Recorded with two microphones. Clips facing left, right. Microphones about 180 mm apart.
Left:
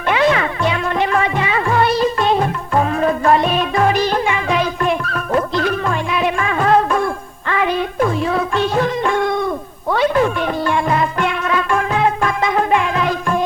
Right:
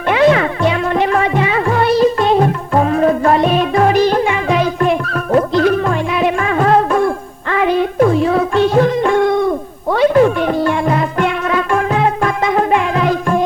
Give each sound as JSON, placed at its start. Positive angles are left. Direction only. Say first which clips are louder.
{"t": 0.1, "sound": "music", "louder": "right 4 dB", "side_deg": -45}